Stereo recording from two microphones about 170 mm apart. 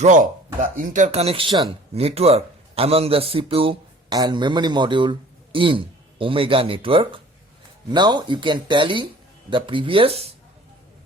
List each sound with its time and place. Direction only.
0.0 s a man's voice: 50° right (ahead or behind); by 10.2 s 35° right (ahead or behind)